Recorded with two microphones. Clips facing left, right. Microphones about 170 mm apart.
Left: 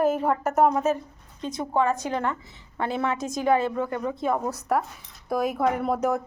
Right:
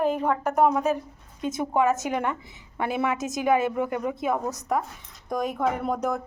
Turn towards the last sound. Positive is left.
turn(degrees=5)  # may be behind; listen again after turning